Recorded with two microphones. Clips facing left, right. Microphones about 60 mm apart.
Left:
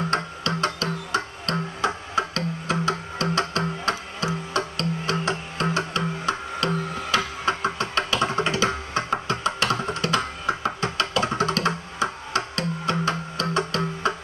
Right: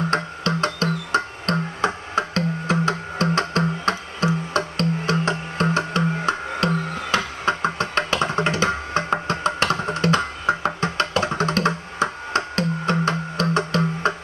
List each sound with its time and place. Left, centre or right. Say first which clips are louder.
0.1 s music: right 3 dB; right